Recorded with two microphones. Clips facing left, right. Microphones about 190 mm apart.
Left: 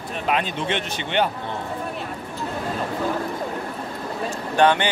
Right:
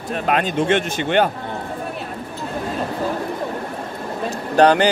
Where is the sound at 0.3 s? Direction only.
45° right (ahead or behind).